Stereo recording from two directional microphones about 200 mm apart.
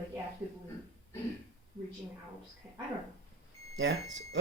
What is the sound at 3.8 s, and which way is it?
Speech, 65° right (ahead or behind).